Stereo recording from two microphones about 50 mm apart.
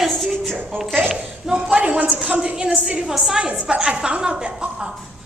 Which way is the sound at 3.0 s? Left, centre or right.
Centre.